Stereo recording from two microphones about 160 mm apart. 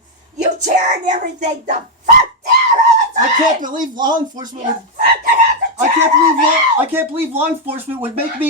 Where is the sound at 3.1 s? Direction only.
55° right (ahead or behind).